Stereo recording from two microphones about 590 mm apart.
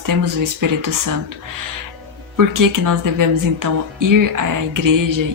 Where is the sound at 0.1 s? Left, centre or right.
Right.